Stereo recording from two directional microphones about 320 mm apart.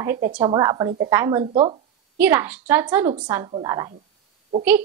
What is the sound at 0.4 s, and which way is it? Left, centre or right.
A woman's voice, centre.